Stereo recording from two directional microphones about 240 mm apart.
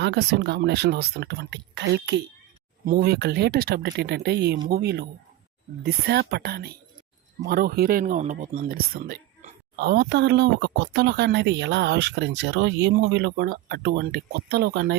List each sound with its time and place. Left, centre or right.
0.0 s speech: right